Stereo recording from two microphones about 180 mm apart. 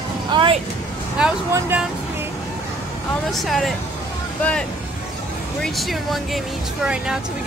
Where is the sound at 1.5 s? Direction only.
10° right (ahead or behind).